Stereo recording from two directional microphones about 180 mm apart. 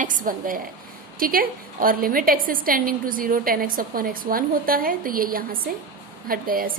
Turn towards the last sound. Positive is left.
turn(degrees=-55)  # may be behind; listen again after turning